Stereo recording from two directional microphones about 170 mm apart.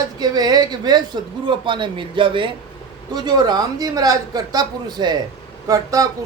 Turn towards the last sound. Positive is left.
turn(degrees=-20)  # may be behind; listen again after turning